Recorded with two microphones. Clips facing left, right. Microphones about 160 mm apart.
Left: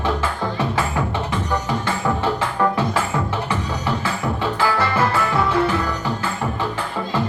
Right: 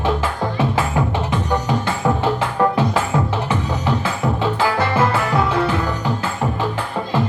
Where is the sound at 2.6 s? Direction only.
25° right (ahead or behind).